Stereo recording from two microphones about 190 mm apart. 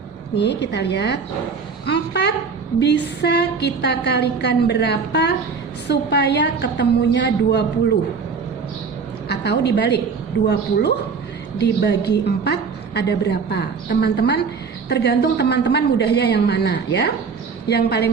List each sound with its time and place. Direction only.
0.3 s a woman's voice: 65° left (ahead or behind)
9.3 s a woman's voice: 60° left (ahead or behind)